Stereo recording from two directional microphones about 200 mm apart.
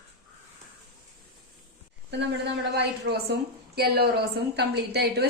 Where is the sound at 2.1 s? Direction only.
60° right (ahead or behind).